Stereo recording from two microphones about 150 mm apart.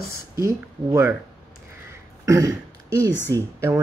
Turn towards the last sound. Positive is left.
turn(degrees=-20)  # may be behind; listen again after turning